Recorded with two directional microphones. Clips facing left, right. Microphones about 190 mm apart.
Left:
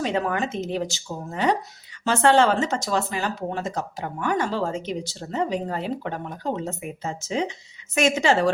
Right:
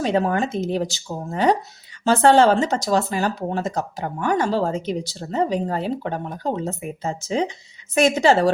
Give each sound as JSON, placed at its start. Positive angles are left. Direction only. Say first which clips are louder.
{"t": 0.0, "sound": "speech", "louder": "right 4 dB", "side_deg": -35}